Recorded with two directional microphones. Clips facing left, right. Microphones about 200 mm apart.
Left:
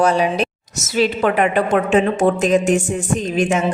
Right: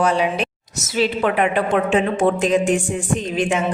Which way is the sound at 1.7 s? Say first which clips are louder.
Left 2 dB; 45° left (ahead or behind).